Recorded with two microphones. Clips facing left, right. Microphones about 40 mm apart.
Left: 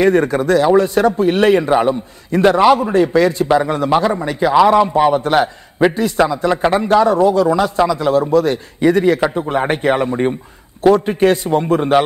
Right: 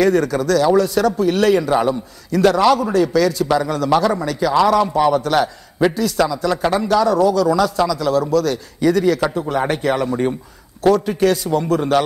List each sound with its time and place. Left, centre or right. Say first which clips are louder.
0.0 s a man's voice: left 2 dB; left